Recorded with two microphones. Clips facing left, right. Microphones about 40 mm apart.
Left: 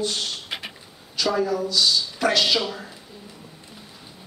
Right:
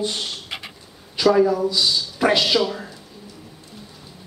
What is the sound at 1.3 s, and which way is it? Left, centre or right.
Speech, centre.